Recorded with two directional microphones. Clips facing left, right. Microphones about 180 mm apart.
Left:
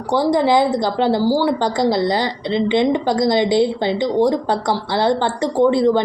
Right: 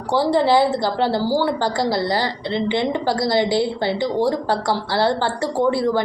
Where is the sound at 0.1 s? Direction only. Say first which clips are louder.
Left 1 dB; 15° left (ahead or behind).